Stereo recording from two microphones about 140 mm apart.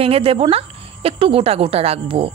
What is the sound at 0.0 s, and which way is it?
Speech, 45° right (ahead or behind).